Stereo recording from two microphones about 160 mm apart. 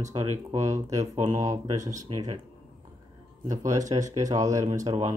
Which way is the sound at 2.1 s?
35° right (ahead or behind).